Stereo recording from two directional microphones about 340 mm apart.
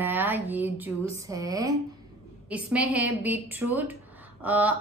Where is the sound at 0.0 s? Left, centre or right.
Centre.